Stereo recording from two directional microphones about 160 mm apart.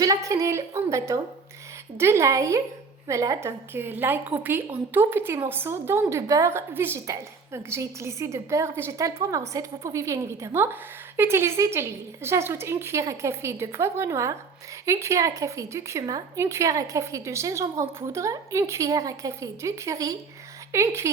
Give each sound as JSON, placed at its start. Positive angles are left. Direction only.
{"t": 0.0, "sound": "a woman's voice", "side_deg": -20}